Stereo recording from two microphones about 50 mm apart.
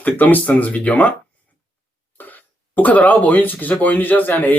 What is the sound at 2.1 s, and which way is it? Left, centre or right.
Speech, left.